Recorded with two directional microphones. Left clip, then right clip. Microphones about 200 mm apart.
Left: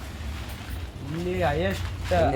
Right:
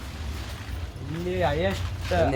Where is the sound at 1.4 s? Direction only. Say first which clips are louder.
Right 1 dB; 10° left (ahead or behind).